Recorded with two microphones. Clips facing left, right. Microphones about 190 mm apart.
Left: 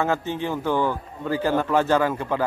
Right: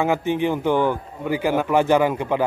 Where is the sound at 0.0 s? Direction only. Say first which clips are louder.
Right 4 dB; 15° right (ahead or behind).